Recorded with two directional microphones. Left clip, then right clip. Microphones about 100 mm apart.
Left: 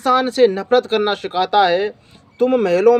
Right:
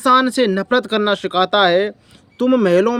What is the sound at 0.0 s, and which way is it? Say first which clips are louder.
Speech: even; 40° right (ahead or behind).